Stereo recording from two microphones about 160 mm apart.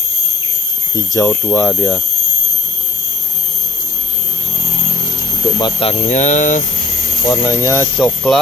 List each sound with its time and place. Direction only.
0.9 s speech: 20° left (ahead or behind)
1.6 s speech: centre (ahead or behind)
5.6 s speech: 25° left (ahead or behind)
5.9 s speech: 50° left (ahead or behind)
7.2 s speech: 20° left (ahead or behind)
8.0 s speech: centre (ahead or behind)